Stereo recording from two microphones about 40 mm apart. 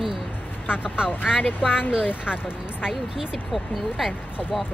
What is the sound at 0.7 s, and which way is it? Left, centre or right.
Speech, right.